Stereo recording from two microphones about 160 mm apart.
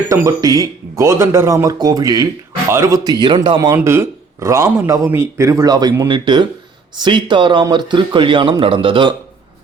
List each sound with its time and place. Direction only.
0.1 s a man's voice: 20° right (ahead or behind)
3.8 s a man's voice: 15° right (ahead or behind); by 9.1 s 30° right (ahead or behind)